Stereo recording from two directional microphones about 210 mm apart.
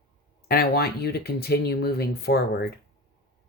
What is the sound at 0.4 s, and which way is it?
Speech, 45° left (ahead or behind).